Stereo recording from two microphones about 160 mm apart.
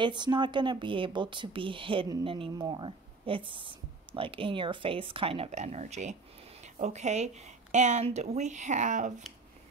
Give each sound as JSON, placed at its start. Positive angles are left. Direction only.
{"t": 0.0, "sound": "a woman's voice", "side_deg": -30}